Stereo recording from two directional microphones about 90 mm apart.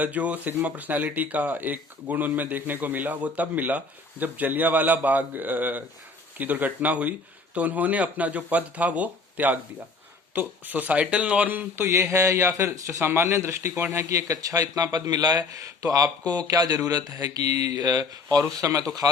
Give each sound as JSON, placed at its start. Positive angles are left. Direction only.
{"t": 0.0, "sound": "speech", "side_deg": -15}